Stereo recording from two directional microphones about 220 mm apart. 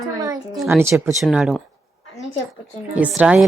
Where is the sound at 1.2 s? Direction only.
Centre (ahead or behind).